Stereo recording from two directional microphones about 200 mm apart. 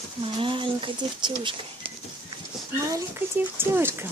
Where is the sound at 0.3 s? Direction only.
25° right (ahead or behind).